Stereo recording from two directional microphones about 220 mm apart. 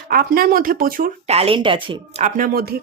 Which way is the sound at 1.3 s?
25° right (ahead or behind).